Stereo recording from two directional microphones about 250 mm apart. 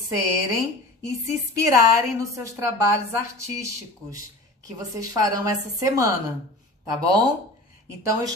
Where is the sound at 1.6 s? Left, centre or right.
Centre.